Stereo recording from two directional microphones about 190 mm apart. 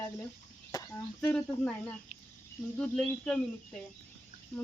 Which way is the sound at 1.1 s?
5° left (ahead or behind).